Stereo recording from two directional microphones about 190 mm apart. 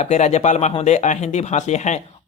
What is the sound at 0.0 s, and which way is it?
Speech, 35° left (ahead or behind).